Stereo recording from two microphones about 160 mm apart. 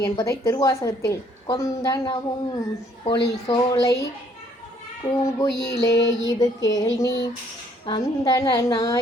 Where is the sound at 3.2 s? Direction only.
20° left (ahead or behind).